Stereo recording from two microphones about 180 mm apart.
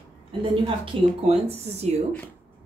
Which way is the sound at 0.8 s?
35° right (ahead or behind).